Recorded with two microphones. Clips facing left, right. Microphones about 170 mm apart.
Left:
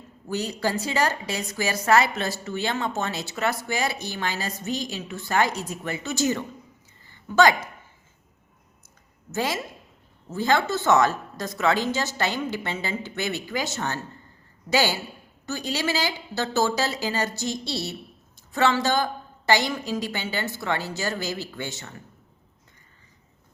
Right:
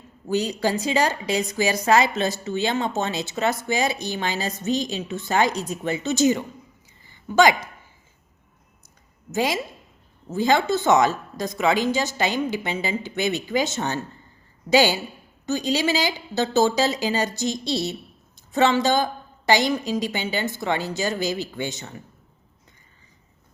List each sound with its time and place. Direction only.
0.3 s a woman's voice: 15° right (ahead or behind)
7.0 s a sound: 15° right (ahead or behind)
9.3 s a woman's voice: 15° right (ahead or behind)